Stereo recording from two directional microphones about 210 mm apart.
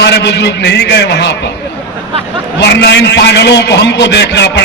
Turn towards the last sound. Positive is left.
turn(degrees=55)  # may be behind; listen again after turning